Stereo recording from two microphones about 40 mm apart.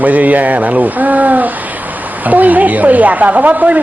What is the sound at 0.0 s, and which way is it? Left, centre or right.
A woman's voice, right.